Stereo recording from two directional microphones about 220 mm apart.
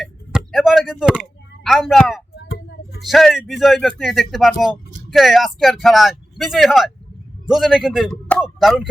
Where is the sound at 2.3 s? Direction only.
50° left (ahead or behind).